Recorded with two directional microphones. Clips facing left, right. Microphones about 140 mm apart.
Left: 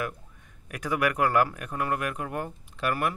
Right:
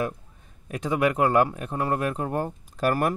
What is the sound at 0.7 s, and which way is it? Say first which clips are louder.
Speech: right 4 dB; 25° right (ahead or behind).